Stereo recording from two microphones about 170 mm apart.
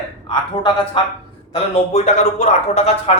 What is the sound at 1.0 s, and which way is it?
Speech, 30° left (ahead or behind).